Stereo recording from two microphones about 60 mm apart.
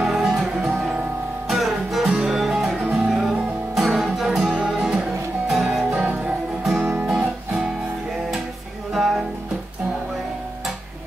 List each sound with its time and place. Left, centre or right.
0.0 s music: centre
5.9 s music: right
7.2 s music: centre
8.9 s music: centre